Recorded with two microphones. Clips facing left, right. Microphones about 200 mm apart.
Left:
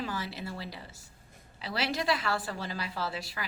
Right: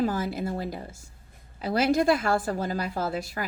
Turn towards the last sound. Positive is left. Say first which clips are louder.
# right 7 dB
turn(degrees=-45)  # may be behind; listen again after turning